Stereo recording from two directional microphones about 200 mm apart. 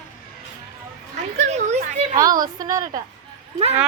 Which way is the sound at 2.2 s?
20° right (ahead or behind).